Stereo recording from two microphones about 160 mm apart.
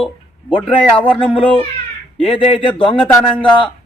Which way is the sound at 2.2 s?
35° left (ahead or behind).